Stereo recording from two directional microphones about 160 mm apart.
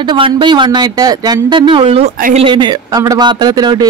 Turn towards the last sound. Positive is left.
turn(degrees=-25)  # may be behind; listen again after turning